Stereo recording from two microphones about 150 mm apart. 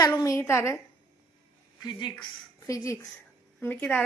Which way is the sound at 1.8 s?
30° left (ahead or behind).